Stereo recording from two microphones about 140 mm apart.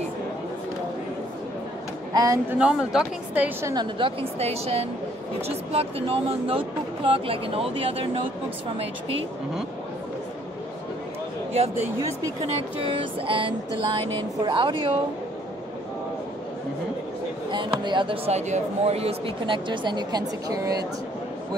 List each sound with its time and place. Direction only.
2.1 s speech: 25° right (ahead or behind)
2.6 s a woman's voice: 5° right (ahead or behind)
3.7 s speech: 35° right (ahead or behind)
12.4 s speech: 40° right (ahead or behind)
17.5 s speech: 35° right (ahead or behind)